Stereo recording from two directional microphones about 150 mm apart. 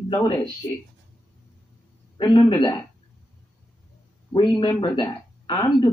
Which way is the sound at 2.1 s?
30° left (ahead or behind).